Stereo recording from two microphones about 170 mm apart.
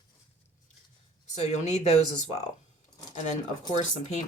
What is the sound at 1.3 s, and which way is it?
Speech, 40° left (ahead or behind).